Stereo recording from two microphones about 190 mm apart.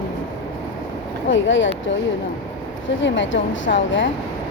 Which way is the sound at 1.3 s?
80° left.